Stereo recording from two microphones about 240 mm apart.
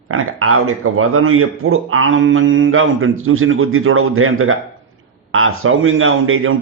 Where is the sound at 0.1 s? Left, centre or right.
Right.